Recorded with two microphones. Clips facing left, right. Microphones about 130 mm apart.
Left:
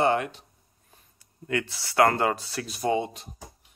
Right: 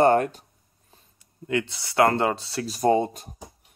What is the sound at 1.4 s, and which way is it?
Speech, 25° right (ahead or behind).